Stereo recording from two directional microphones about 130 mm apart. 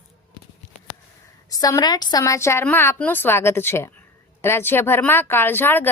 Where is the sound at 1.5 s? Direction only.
30° left (ahead or behind).